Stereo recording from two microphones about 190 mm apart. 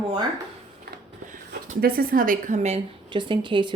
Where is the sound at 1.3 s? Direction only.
45° right (ahead or behind).